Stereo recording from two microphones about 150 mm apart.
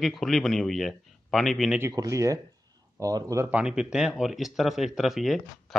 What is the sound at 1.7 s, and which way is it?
Speech, 20° right (ahead or behind).